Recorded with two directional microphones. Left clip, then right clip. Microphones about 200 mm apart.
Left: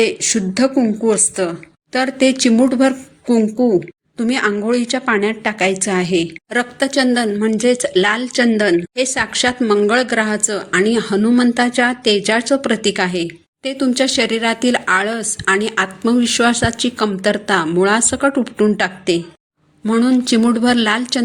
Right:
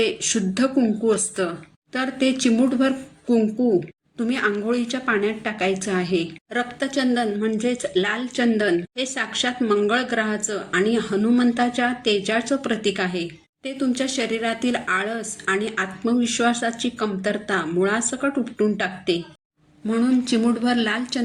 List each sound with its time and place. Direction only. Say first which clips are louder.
0.0 s a woman's voice: left 6 dB; 35° left (ahead or behind)